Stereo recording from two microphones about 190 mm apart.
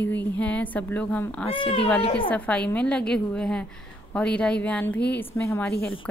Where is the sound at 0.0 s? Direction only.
10° left (ahead or behind).